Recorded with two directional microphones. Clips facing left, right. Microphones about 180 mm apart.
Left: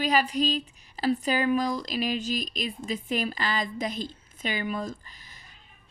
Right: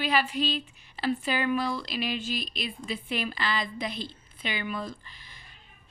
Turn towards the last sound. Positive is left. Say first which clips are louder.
# even
turn(degrees=40)  # may be behind; listen again after turning